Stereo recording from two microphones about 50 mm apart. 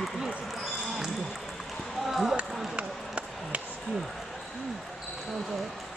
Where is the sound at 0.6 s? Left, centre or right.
Centre.